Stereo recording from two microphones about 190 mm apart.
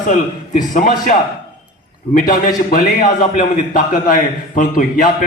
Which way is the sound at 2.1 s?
45° left (ahead or behind).